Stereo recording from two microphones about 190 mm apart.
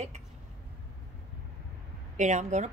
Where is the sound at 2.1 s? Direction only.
40° right (ahead or behind).